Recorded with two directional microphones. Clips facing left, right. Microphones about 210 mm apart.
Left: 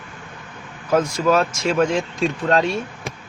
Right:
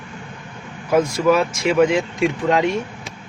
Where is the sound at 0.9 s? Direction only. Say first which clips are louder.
Right 2 dB; 15° right (ahead or behind).